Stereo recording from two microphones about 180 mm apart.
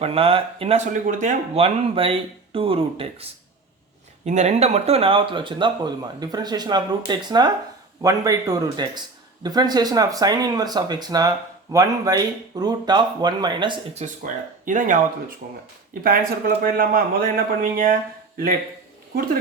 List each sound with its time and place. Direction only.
0.0 s speech: 30° right (ahead or behind)
1.0 s a man's voice: 45° right (ahead or behind)
1.5 s speech: 30° right (ahead or behind)
4.3 s speech: 40° right (ahead or behind)
14.0 s speech: 40° right (ahead or behind)
16.0 s a man's voice: 55° right (ahead or behind)